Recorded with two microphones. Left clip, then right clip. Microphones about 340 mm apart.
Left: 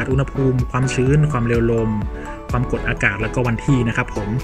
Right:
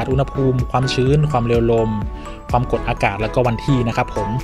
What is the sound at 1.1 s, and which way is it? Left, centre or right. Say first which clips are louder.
Speech: right 2 dB; centre.